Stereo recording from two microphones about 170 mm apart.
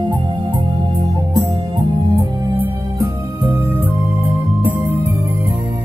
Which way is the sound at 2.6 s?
10° right (ahead or behind).